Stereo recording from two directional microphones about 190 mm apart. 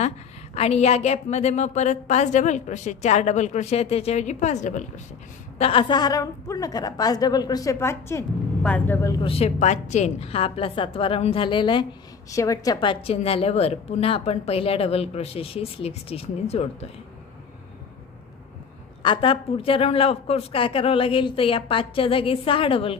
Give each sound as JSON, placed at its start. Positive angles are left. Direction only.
{"t": 0.6, "sound": "a woman's voice", "side_deg": 35}
{"t": 5.6, "sound": "speech", "side_deg": 30}
{"t": 9.2, "sound": "a woman's voice", "side_deg": 30}
{"t": 19.0, "sound": "speech", "side_deg": 30}